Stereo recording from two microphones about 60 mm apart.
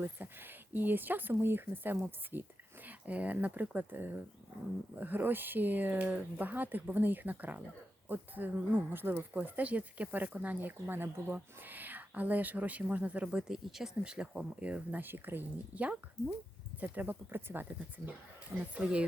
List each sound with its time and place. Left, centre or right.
0.0 s a woman's voice: right
13.3 s speech: centre
15.0 s speech: right
18.7 s speech: centre